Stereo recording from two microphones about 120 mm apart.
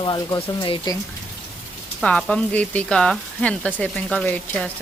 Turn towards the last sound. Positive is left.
turn(degrees=10)  # may be behind; listen again after turning